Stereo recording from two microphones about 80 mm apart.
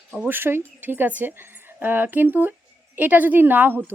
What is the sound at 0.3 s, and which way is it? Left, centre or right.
Speech, right.